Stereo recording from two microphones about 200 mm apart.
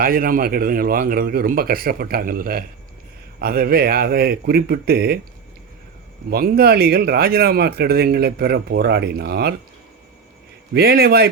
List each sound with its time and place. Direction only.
0.0 s speech: 45° right (ahead or behind)
6.3 s speech: 50° right (ahead or behind)
10.8 s speech: 50° right (ahead or behind)